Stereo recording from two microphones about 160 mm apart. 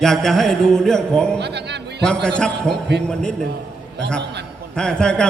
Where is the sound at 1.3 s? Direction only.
90° right.